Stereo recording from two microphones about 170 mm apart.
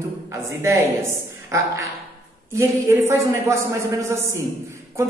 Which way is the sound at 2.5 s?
15° right (ahead or behind).